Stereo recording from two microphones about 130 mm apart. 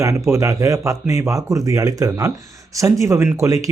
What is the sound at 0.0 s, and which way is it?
Speech, 25° right (ahead or behind).